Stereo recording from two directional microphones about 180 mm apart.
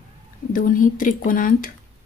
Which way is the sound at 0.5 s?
50° left (ahead or behind).